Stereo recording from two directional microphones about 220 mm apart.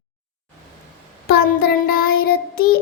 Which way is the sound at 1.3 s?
45° left (ahead or behind).